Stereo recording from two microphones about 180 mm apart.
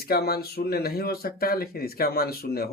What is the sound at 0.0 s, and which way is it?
Speech, 60° left (ahead or behind).